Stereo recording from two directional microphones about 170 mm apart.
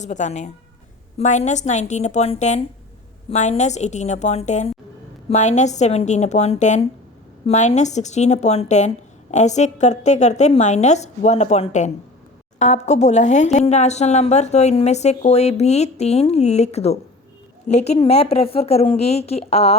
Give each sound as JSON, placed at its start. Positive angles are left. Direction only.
{"t": 0.0, "sound": "a woman's voice", "side_deg": 45}